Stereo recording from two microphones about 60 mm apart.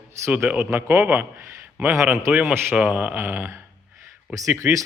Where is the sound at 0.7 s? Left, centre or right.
Right.